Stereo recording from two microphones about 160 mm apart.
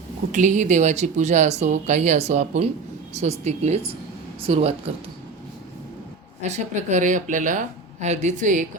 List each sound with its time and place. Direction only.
0.3 s speech: 50° right (ahead or behind)
6.4 s speech: 45° right (ahead or behind)